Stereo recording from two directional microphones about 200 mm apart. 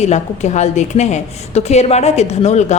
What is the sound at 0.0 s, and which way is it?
A woman's voice, 35° left (ahead or behind).